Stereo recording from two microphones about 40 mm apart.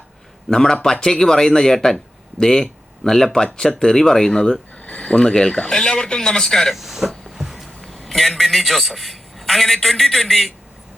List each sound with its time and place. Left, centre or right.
0.5 s a man's voice: centre
4.8 s a man's voice: left; by 6.7 s centre
6.7 s speech: centre
7.3 s a sound: centre
7.9 s a man's voice: centre